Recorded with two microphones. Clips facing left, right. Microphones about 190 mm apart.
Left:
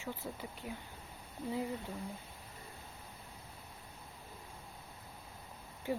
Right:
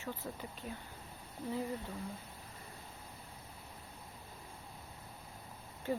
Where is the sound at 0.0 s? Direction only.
15° left (ahead or behind).